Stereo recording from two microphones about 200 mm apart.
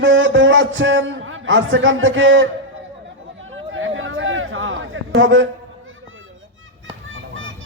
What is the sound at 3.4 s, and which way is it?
Chatter, 75° right (ahead or behind).